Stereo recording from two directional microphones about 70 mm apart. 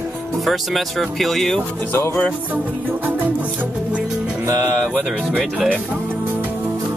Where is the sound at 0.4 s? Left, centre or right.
Centre.